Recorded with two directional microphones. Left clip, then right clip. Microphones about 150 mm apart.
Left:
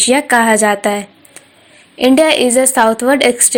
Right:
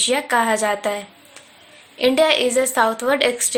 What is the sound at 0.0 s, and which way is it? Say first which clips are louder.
A woman's voice: left 7 dB; 45° left (ahead or behind).